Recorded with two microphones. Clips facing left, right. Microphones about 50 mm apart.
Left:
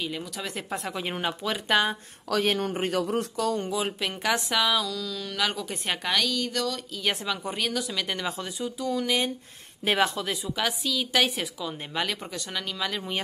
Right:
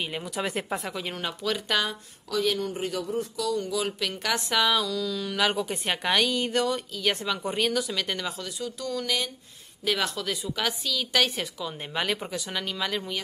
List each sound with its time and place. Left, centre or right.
0.0 s speech: right
0.7 s a woman's voice: centre
1.1 s speech: centre
2.2 s speech: left
3.4 s speech: left
3.8 s speech: left
4.2 s a woman's voice: centre
6.1 s speech: right
7.0 s a woman's voice: centre
8.4 s speech: left
8.7 s speech: centre
9.8 s speech: left
10.3 s a woman's voice: centre